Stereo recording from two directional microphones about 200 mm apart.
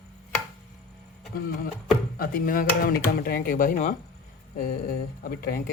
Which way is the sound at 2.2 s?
45° left (ahead or behind).